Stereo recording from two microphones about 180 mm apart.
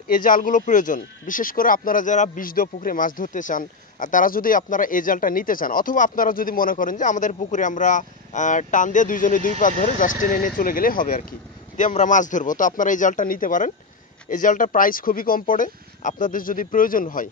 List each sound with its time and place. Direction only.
0.1 s speech: 50° left (ahead or behind)